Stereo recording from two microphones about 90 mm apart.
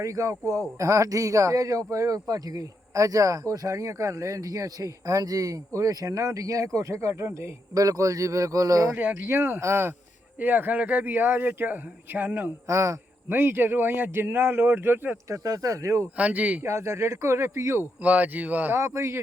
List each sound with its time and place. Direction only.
0.0 s speech: 35° right (ahead or behind)
7.7 s speech: 40° right (ahead or behind)
9.0 s a man's voice: 20° right (ahead or behind)
12.6 s a man's voice: 35° right (ahead or behind)
15.3 s speech: 40° right (ahead or behind)
16.1 s speech: 15° right (ahead or behind)
16.6 s speech: 30° right (ahead or behind)
18.0 s speech: 15° right (ahead or behind)
18.8 s speech: 30° right (ahead or behind)